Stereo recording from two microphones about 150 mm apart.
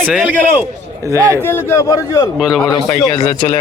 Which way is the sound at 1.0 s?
20° right (ahead or behind).